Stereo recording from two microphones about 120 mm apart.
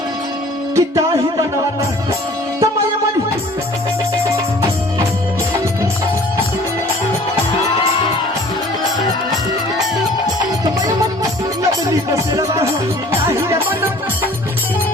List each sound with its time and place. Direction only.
0.8 s music: 30° right (ahead or behind)
10.8 s music: 30° right (ahead or behind)